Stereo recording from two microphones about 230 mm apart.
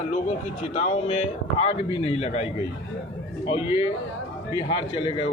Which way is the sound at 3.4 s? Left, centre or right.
Left.